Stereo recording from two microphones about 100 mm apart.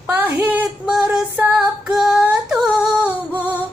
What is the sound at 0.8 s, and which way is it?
Music, 5° right (ahead or behind).